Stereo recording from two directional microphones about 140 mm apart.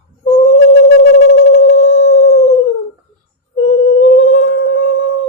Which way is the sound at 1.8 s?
55° left (ahead or behind).